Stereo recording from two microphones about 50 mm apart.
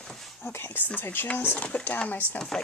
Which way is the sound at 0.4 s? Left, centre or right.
Left.